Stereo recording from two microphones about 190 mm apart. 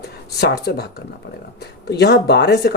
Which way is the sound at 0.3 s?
55° left (ahead or behind).